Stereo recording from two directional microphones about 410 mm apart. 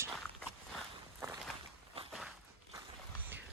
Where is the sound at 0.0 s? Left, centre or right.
Centre.